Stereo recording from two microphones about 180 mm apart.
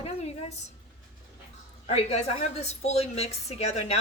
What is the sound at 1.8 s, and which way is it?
A woman's voice, 35° left (ahead or behind).